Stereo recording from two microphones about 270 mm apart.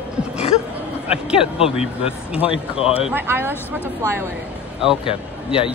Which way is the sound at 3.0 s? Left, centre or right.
Centre.